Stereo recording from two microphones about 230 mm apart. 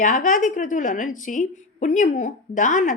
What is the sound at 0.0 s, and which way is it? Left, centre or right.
A woman's voice, left.